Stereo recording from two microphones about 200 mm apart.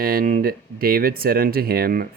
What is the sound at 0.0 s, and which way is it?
Speech, 45° right (ahead or behind).